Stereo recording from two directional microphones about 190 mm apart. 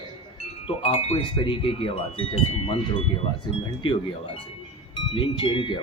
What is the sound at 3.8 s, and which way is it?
Speech, 25° left (ahead or behind).